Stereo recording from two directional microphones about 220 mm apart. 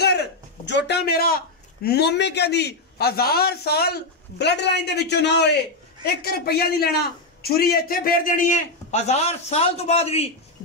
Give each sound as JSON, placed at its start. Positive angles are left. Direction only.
{"t": 0.7, "sound": "a man's voice", "side_deg": 50}